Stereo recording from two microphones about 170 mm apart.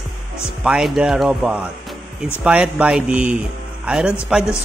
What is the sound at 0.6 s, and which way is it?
Speech, 5° right (ahead or behind).